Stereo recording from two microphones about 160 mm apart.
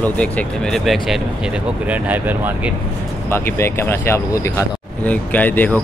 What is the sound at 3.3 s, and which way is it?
Speech, 15° left (ahead or behind).